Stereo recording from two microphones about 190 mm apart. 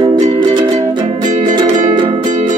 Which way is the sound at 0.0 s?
25° right (ahead or behind).